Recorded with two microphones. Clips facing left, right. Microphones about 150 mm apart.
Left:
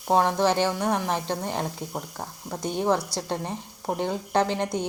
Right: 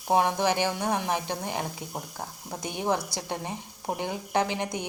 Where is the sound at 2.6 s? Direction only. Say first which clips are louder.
Left 7 dB; 10° right (ahead or behind).